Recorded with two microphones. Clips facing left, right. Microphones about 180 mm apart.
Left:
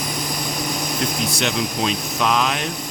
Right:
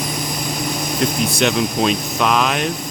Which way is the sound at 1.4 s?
60° right (ahead or behind).